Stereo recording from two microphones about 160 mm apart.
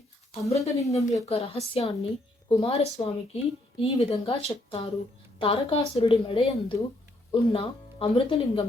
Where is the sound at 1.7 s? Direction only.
35° left (ahead or behind).